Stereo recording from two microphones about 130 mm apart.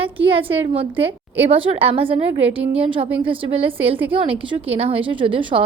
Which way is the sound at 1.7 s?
45° right (ahead or behind).